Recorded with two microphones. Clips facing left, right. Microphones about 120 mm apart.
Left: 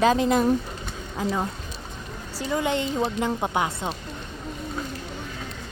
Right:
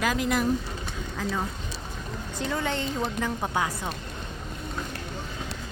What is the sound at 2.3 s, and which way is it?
A woman's voice, 10° left (ahead or behind).